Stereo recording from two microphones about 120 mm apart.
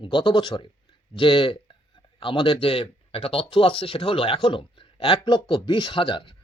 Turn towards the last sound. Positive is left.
turn(degrees=45)  # may be behind; listen again after turning